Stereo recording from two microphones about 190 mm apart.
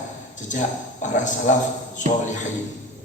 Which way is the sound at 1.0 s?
40° left (ahead or behind).